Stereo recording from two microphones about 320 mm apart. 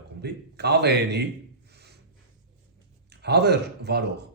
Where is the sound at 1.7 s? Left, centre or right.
Right.